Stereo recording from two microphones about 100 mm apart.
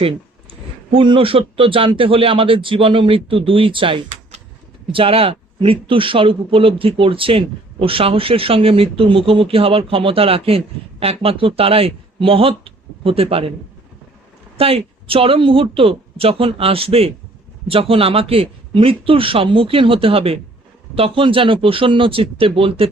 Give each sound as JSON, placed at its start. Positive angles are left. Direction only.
{"t": 0.9, "sound": "a man's voice", "side_deg": -60}
{"t": 14.6, "sound": "a man's voice", "side_deg": -70}